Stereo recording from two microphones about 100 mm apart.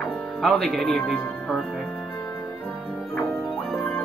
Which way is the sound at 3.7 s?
5° left (ahead or behind).